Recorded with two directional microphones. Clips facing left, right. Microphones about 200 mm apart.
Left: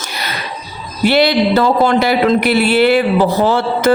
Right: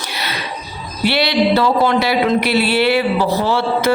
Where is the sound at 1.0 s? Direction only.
45° left (ahead or behind).